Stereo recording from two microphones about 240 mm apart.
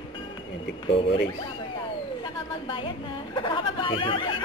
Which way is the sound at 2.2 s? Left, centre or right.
Left.